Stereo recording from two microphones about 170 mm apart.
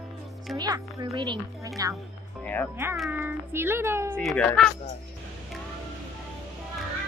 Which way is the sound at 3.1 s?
10° right (ahead or behind).